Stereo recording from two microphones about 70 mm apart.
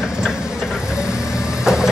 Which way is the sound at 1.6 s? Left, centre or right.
Centre.